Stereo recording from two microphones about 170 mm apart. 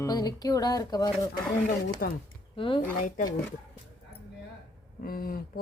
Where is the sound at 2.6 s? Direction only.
30° left (ahead or behind).